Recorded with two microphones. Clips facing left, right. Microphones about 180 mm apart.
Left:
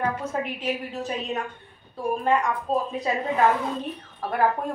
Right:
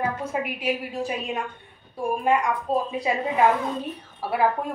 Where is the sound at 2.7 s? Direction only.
15° left (ahead or behind).